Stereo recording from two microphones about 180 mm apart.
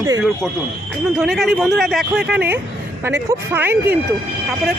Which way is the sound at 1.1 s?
Centre (ahead or behind).